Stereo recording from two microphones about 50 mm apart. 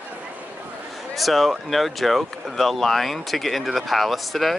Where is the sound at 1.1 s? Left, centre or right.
Centre.